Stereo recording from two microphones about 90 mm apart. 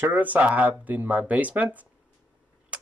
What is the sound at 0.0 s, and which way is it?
Speech, 20° right (ahead or behind).